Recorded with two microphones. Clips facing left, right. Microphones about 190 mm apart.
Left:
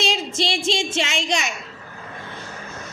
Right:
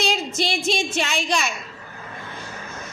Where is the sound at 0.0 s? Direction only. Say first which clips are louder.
Even; 25° left (ahead or behind).